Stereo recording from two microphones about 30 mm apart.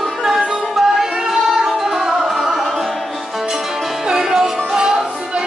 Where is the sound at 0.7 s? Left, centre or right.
Centre.